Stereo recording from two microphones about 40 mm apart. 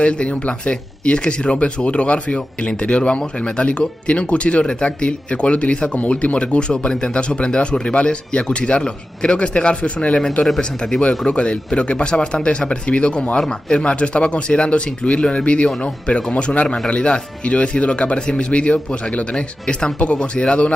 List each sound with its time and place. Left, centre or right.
0.0 s speech: left